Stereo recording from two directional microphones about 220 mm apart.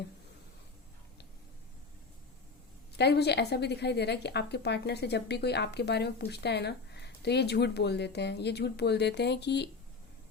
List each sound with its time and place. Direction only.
3.0 s a woman's voice: 50° left (ahead or behind)